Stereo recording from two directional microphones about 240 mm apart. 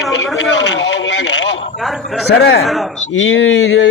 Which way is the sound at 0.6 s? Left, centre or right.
Left.